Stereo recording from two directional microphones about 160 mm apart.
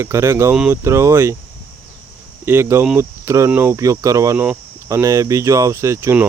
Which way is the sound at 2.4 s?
15° right (ahead or behind).